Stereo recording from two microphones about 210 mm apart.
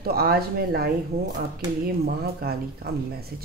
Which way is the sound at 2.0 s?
50° right (ahead or behind).